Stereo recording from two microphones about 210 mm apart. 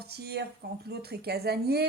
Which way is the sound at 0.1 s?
50° right (ahead or behind).